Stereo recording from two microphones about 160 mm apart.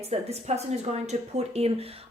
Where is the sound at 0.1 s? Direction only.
45° right (ahead or behind).